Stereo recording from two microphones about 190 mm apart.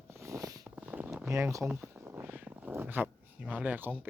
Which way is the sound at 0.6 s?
10° right (ahead or behind).